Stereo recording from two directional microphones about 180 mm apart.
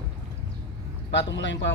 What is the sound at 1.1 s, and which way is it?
Speech, 85° left.